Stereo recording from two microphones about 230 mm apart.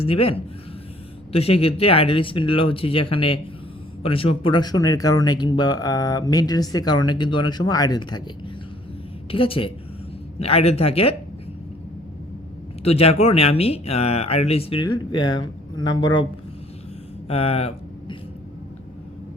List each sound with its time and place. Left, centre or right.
0.0 s speech: left
9.3 s speech: left
12.8 s speech: left
17.2 s a sound: left